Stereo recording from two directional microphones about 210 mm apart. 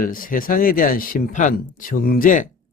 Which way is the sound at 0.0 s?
40° left (ahead or behind).